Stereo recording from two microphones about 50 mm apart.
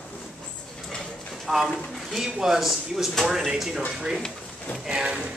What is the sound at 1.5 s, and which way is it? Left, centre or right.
Speech, centre.